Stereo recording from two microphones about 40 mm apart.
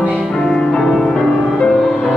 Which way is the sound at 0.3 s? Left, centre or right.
Centre.